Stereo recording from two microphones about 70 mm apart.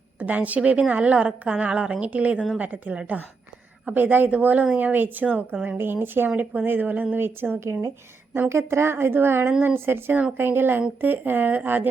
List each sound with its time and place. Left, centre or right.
0.2 s a woman's voice: right
7.6 s a woman's voice: right
8.3 s a woman's voice: right